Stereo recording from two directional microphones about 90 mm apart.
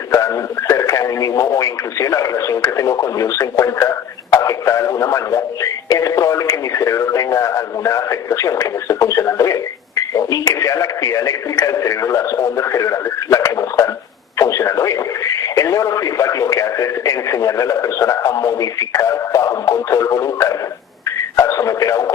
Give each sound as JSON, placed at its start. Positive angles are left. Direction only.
{"t": 0.7, "sound": "speech", "side_deg": 35}